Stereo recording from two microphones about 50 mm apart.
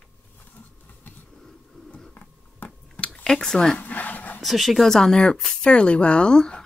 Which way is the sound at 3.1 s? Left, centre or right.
Centre.